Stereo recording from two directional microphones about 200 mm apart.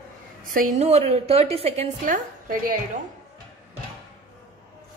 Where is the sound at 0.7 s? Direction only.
30° right (ahead or behind).